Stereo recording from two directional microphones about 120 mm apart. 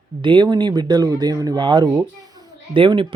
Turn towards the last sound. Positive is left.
turn(degrees=-45)  # may be behind; listen again after turning